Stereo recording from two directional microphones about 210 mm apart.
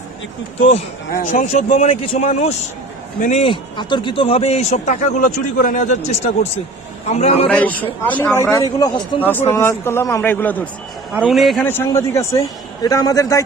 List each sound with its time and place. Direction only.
1.3 s a man's voice: 35° left (ahead or behind)
7.5 s a man's voice: 5° left (ahead or behind)
11.1 s a man's voice: 5° right (ahead or behind); by 13.4 s 15° left (ahead or behind)